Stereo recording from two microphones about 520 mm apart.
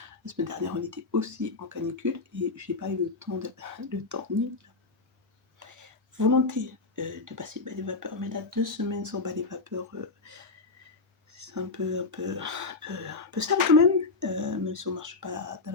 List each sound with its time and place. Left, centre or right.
0.3 s speech: right
11.3 s speech: right